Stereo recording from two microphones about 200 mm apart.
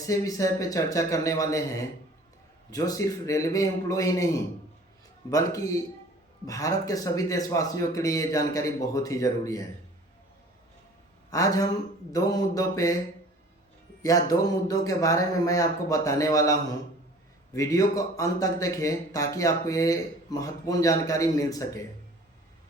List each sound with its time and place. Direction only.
0.0 s speech: 15° left (ahead or behind)
5.3 s speech: 15° left (ahead or behind)
11.3 s speech: 15° left (ahead or behind)
14.0 s speech: 15° left (ahead or behind)